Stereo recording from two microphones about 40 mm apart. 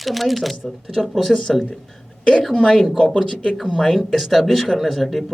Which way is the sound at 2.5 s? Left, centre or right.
Left.